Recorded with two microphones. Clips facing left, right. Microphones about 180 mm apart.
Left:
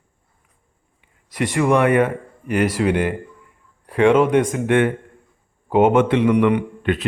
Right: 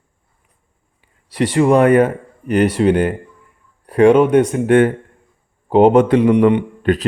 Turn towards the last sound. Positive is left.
turn(degrees=-40)  # may be behind; listen again after turning